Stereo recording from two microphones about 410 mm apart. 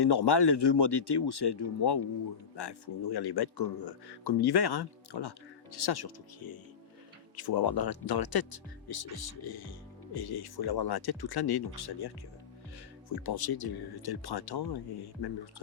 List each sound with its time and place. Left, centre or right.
0.0 s speech: left